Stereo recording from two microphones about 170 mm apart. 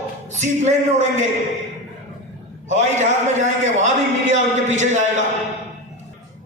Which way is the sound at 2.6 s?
45° right (ahead or behind).